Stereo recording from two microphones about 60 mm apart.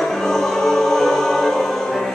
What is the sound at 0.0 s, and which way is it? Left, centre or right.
Choir, centre.